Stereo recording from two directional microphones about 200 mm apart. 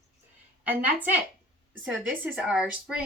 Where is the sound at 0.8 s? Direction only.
10° right (ahead or behind).